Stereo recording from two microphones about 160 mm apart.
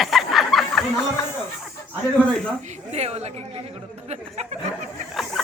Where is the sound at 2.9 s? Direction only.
40° right (ahead or behind).